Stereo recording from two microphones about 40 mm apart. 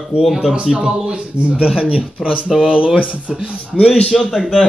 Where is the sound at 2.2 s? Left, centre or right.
Centre.